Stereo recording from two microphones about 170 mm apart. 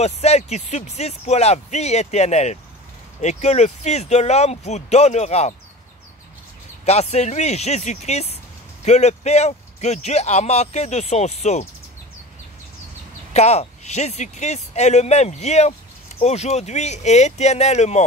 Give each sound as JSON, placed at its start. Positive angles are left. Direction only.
{"t": 0.0, "sound": "a man's voice", "side_deg": 40}
{"t": 6.9, "sound": "a man's voice", "side_deg": 40}
{"t": 13.3, "sound": "a man's voice", "side_deg": 40}